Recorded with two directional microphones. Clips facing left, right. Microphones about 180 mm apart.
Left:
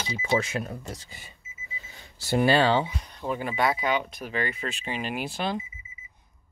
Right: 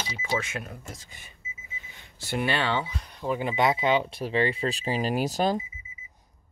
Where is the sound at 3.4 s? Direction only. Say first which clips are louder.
Right 2 dB; 20° right (ahead or behind); by 5.6 s 40° right (ahead or behind).